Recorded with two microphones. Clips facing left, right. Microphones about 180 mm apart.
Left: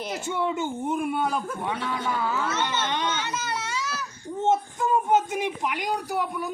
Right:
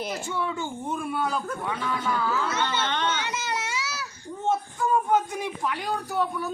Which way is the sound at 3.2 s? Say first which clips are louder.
Even; 15° right (ahead or behind).